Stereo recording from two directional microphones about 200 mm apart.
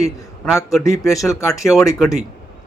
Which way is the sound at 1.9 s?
Centre (ahead or behind).